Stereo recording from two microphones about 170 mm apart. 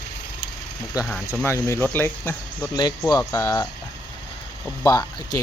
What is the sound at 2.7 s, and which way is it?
Speech, 25° left (ahead or behind).